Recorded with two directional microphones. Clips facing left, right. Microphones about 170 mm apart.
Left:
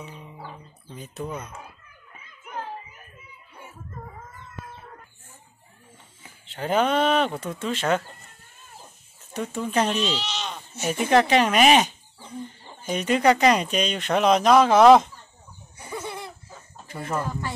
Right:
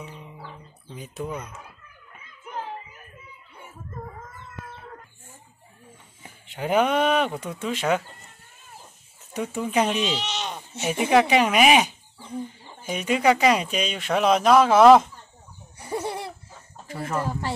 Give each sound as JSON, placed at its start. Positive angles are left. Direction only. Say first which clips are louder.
{"t": 0.0, "sound": "music", "louder": "even", "side_deg": 0}
{"t": 0.9, "sound": "speech", "louder": "right 1 dB", "side_deg": -10}
{"t": 6.4, "sound": "speech", "louder": "right 1 dB", "side_deg": -15}
{"t": 9.3, "sound": "speech", "louder": "right 1 dB", "side_deg": -10}
{"t": 15.9, "sound": "a sound", "louder": "right 5 dB", "side_deg": -35}
{"t": 16.9, "sound": "speech", "louder": "right 1 dB", "side_deg": -5}
{"t": 17.3, "sound": "speech", "louder": "right 3 dB", "side_deg": -30}